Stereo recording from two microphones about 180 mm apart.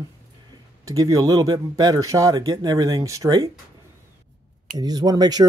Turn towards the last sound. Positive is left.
turn(degrees=-20)  # may be behind; listen again after turning